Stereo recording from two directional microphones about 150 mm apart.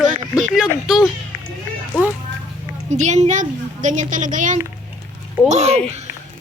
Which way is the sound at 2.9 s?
50° right (ahead or behind).